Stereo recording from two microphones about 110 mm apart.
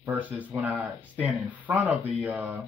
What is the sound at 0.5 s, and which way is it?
Speech, 15° right (ahead or behind).